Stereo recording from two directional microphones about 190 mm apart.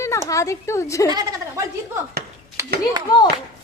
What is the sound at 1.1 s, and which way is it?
Speech, 20° right (ahead or behind).